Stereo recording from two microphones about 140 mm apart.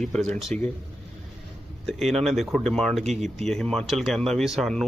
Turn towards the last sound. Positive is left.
turn(degrees=5)  # may be behind; listen again after turning